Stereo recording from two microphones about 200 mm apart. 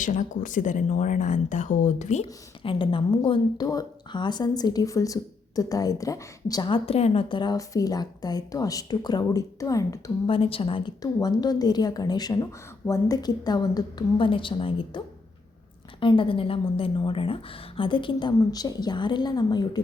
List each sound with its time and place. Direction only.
0.0 s speech: 40° left (ahead or behind)
2.6 s a woman's voice: 25° left (ahead or behind)